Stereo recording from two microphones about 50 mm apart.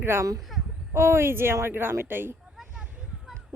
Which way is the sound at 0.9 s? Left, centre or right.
Right.